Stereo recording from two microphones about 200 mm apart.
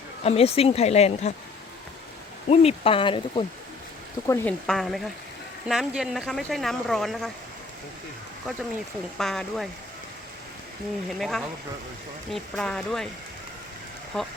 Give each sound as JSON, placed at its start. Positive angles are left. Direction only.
{"t": 0.2, "sound": "speech", "side_deg": 30}
{"t": 2.5, "sound": "speech", "side_deg": 30}
{"t": 4.3, "sound": "speech", "side_deg": 5}
{"t": 9.1, "sound": "speech", "side_deg": 0}
{"t": 11.2, "sound": "speech", "side_deg": 0}